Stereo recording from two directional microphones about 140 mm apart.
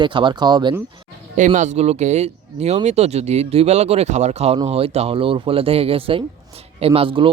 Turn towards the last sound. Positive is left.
turn(degrees=-40)  # may be behind; listen again after turning